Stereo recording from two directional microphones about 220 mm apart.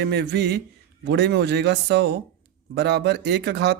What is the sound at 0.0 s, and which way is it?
Speech, 50° right (ahead or behind).